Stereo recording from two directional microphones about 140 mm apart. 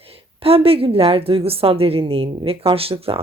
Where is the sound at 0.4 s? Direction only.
45° right (ahead or behind).